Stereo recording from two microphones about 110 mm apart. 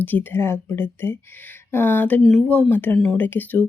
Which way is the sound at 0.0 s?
15° left (ahead or behind).